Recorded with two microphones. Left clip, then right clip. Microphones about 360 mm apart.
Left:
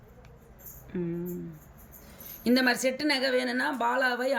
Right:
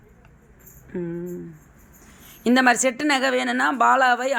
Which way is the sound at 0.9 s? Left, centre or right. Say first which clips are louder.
Right 4 dB; centre.